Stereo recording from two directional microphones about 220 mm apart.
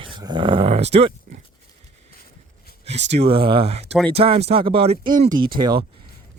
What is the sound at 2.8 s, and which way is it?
Speech, 30° right (ahead or behind).